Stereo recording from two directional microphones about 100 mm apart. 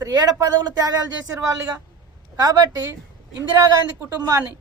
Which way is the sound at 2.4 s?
40° right (ahead or behind).